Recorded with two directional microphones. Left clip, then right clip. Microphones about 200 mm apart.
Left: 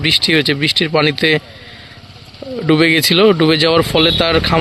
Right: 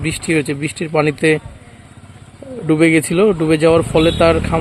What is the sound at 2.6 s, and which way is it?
Speech, 5° left (ahead or behind).